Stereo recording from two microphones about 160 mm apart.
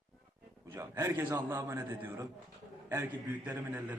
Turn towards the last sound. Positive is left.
turn(degrees=-10)  # may be behind; listen again after turning